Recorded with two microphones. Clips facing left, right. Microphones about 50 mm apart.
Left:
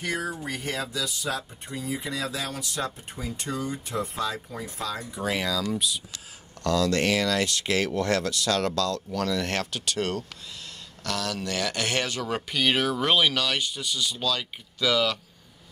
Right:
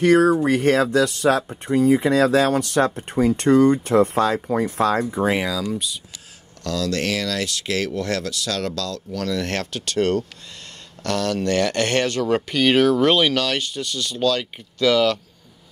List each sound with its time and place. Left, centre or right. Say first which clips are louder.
0.0 s speech: right 15 dB; right
5.0 s speech: right 8 dB; right
5.4 s speech: right 3 dB; centre
6.6 s speech: even; centre